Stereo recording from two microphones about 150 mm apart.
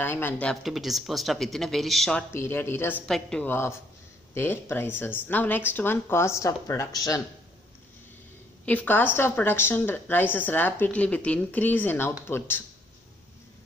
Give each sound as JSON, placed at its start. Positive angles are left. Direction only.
{"t": 0.0, "sound": "speech", "side_deg": 15}
{"t": 2.3, "sound": "a woman's voice", "side_deg": 15}
{"t": 3.1, "sound": "speech", "side_deg": 5}
{"t": 3.5, "sound": "a woman's voice", "side_deg": 15}
{"t": 8.6, "sound": "a woman's voice", "side_deg": 10}